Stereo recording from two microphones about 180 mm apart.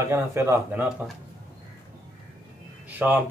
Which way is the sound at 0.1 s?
15° right (ahead or behind).